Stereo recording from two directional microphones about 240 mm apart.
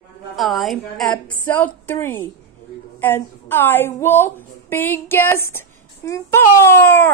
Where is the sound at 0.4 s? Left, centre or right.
Centre.